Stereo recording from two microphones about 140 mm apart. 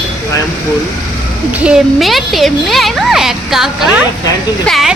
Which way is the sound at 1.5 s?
5° right (ahead or behind).